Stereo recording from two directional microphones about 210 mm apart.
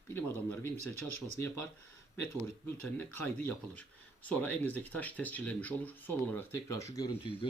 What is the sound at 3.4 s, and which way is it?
Speech, 5° left (ahead or behind).